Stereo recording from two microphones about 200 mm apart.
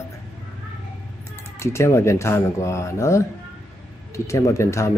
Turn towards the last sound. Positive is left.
turn(degrees=15)  # may be behind; listen again after turning